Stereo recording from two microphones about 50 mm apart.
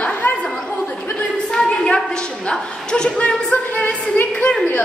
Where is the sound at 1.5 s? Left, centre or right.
Centre.